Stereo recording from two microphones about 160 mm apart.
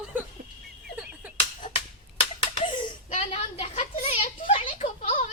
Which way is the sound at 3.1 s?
40° left (ahead or behind).